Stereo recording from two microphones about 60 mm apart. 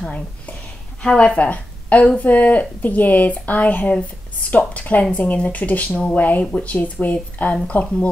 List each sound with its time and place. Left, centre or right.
1.0 s speech: centre